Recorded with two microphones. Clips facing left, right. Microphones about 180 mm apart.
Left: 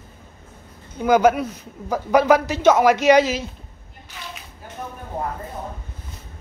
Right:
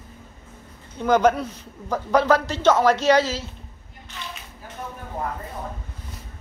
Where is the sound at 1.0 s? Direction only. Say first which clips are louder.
Left 2 dB; 10° left (ahead or behind).